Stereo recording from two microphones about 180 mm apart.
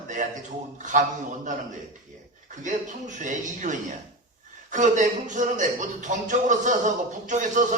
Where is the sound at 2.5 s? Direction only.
45° right (ahead or behind).